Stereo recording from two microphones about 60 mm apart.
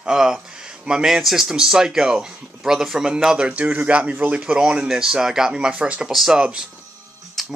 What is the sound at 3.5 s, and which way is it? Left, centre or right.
Speech, right.